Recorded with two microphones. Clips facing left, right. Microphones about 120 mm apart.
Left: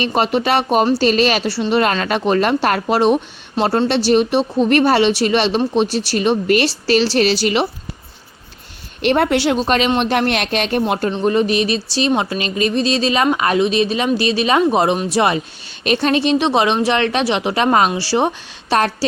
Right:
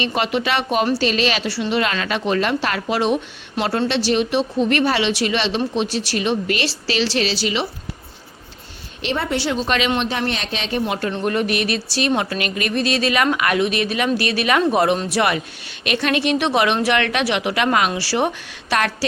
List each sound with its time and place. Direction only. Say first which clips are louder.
0.0 s speech: left 4 dB; 40° left (ahead or behind)
9.0 s speech: left 7 dB; 55° left (ahead or behind); by 9.9 s 40° left (ahead or behind)
10.0 s speech: left 6 dB; 60° left (ahead or behind)
11.1 s speech: left 5 dB; 25° left (ahead or behind)